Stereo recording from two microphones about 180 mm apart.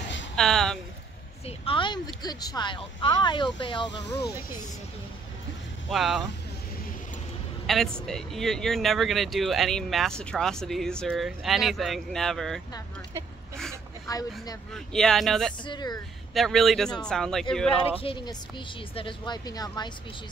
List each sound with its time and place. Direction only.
0.4 s speech: centre (ahead or behind)
1.4 s speech: 30° left (ahead or behind)
5.9 s speech: centre (ahead or behind)
7.6 s speech: centre (ahead or behind)
14.7 s speech: 5° left (ahead or behind)
15.6 s speech: 25° left (ahead or behind)
16.3 s speech: centre (ahead or behind)
18.0 s speech: 25° left (ahead or behind)